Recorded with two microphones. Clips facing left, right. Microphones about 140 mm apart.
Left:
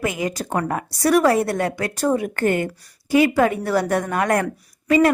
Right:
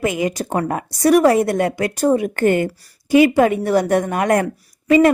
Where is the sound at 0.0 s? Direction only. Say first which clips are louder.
Right 4 dB; 20° right (ahead or behind).